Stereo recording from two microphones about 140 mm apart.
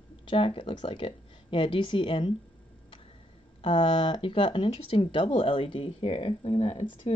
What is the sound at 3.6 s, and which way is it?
Speech, 35° left (ahead or behind).